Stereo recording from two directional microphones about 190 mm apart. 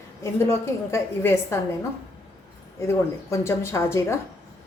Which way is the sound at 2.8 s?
15° left (ahead or behind).